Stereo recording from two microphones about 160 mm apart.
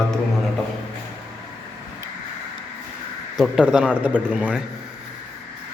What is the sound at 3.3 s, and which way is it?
Speech, 5° right (ahead or behind).